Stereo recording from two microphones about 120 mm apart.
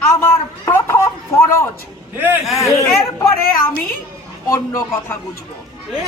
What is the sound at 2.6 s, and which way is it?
Chatter, 25° left (ahead or behind).